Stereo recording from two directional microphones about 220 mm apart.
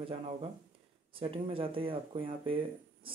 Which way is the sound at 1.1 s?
25° right (ahead or behind).